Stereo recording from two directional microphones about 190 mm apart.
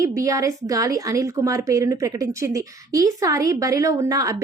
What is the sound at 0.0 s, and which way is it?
A woman's voice, 15° right (ahead or behind).